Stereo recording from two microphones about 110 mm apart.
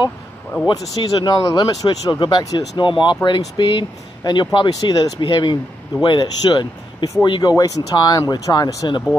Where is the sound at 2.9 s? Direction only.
45° left (ahead or behind).